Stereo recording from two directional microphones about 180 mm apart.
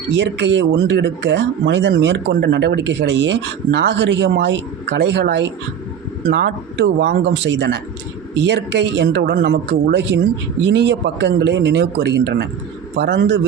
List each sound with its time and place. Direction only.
0.1 s speech: 75° right (ahead or behind)